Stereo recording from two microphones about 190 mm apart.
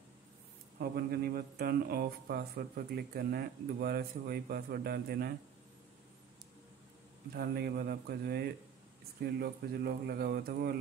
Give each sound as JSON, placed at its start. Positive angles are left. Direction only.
{"t": 0.7, "sound": "speech", "side_deg": -55}
{"t": 7.3, "sound": "speech", "side_deg": -55}